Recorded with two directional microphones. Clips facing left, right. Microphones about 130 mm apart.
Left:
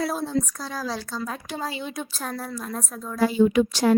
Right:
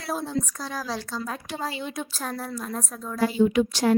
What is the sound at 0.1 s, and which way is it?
A woman's voice, 5° right (ahead or behind).